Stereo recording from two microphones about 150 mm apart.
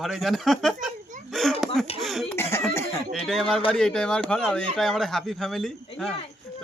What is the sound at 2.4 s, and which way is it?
Cough, 15° left (ahead or behind).